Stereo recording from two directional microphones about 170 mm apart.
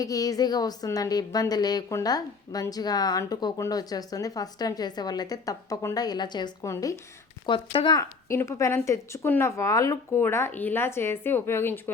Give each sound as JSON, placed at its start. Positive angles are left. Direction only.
{"t": 0.0, "sound": "a woman's voice", "side_deg": 20}
{"t": 7.4, "sound": "a woman's voice", "side_deg": 30}
{"t": 8.3, "sound": "speech", "side_deg": 15}